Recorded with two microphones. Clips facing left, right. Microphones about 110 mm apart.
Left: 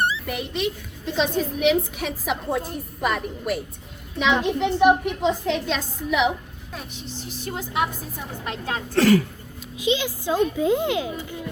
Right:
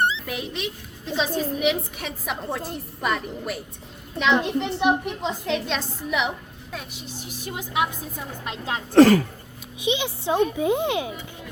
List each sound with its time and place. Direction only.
0.3 s a woman's voice: centre (ahead or behind)
8.9 s speech: 55° right (ahead or behind)
9.8 s speech: 20° right (ahead or behind)